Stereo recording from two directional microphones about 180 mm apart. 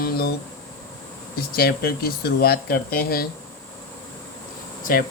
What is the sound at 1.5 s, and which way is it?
Speech, 60° left (ahead or behind).